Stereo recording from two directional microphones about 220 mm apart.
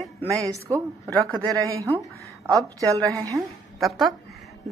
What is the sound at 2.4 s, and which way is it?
Speech, 15° right (ahead or behind).